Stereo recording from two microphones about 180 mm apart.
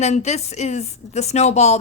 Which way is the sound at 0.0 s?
40° left (ahead or behind).